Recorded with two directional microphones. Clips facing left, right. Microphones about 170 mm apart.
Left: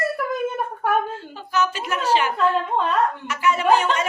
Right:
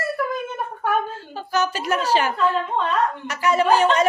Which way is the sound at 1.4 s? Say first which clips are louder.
Right 1 dB; 40° right (ahead or behind).